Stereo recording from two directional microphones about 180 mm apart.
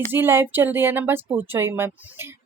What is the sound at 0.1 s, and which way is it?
Speech, 10° right (ahead or behind).